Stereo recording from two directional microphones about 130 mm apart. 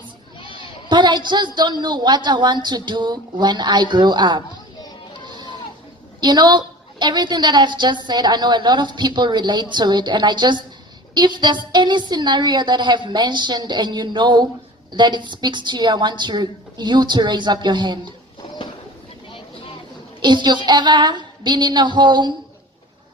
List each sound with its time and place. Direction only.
0.3 s children playing: 40° left (ahead or behind)
0.9 s a woman's voice: 35° right (ahead or behind)
6.1 s a woman's voice: 35° right (ahead or behind)
20.2 s a woman's voice: 35° right (ahead or behind)